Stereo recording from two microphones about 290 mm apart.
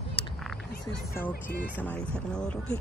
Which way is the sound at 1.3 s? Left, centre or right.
Left.